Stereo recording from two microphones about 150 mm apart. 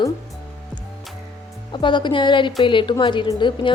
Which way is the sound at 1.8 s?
30° left (ahead or behind).